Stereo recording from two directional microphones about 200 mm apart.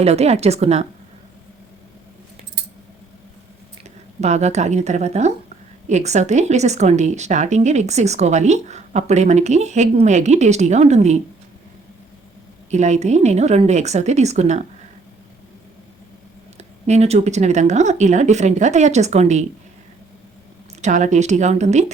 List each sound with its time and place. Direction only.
0.0 s a woman's voice: 30° right (ahead or behind)
3.8 s a woman's voice: 35° right (ahead or behind)
12.7 s a woman's voice: 35° right (ahead or behind)
16.6 s a woman's voice: 35° right (ahead or behind)
20.8 s a woman's voice: 35° right (ahead or behind)